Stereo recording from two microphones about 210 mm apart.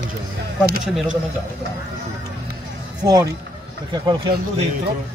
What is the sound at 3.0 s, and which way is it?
Speech, 20° right (ahead or behind).